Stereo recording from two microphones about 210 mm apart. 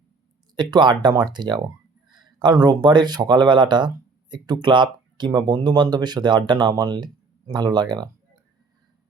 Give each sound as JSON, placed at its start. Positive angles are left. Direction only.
{"t": 0.5, "sound": "speech", "side_deg": -20}